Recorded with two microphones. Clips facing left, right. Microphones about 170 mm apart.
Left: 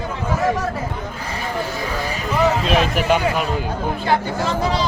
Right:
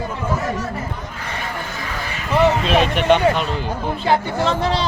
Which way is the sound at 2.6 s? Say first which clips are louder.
Right 1 dB; centre (ahead or behind).